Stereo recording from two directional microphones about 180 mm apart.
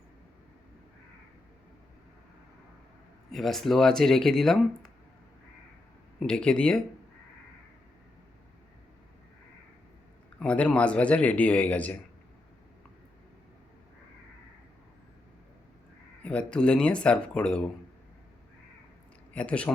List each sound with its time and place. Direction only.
3.3 s speech: centre (ahead or behind)
6.1 s speech: 5° left (ahead or behind)
10.4 s speech: 5° left (ahead or behind)
16.2 s speech: 5° left (ahead or behind)
19.3 s speech: 5° left (ahead or behind)